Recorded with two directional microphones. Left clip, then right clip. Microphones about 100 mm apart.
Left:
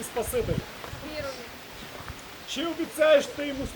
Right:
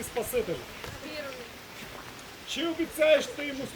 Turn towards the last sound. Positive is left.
turn(degrees=0)  # may be behind; listen again after turning